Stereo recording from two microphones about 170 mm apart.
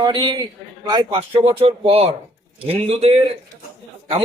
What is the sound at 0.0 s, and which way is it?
A man's voice, 25° right (ahead or behind).